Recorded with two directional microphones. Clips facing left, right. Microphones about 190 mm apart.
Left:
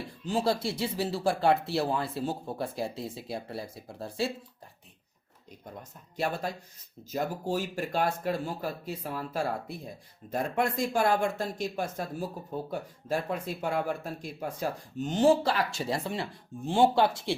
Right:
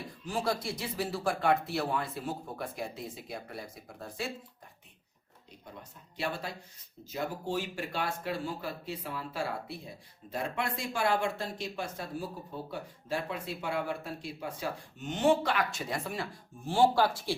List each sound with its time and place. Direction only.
0.3 s speech: 30° left (ahead or behind)
6.5 s speech: 45° left (ahead or behind)
13.1 s speech: 45° left (ahead or behind); by 17.3 s 20° left (ahead or behind)